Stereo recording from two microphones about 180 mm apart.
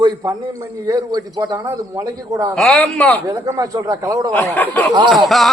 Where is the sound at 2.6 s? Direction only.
5° left (ahead or behind).